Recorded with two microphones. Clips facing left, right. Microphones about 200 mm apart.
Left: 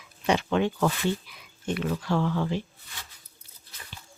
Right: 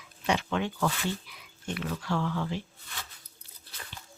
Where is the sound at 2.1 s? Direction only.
30° left (ahead or behind).